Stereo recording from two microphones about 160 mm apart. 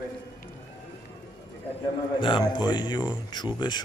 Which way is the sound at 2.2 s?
30° left (ahead or behind).